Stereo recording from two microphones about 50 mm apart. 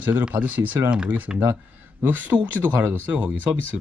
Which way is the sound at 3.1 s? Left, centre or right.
Right.